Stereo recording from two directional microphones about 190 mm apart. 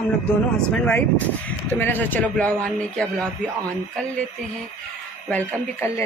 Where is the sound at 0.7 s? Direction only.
10° left (ahead or behind).